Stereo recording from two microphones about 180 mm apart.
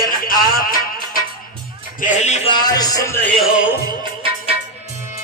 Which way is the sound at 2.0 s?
40° left (ahead or behind).